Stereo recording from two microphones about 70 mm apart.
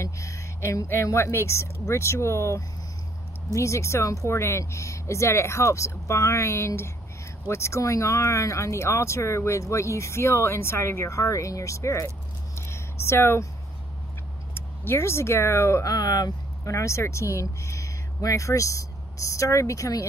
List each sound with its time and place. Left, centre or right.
0.0 s a sound: left
1.0 s speech: left
12.5 s a sound: left
14.5 s speech: left
15.8 s speech: left
16.6 s speech: left